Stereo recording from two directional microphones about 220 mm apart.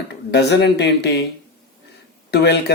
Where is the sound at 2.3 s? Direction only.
50° left (ahead or behind).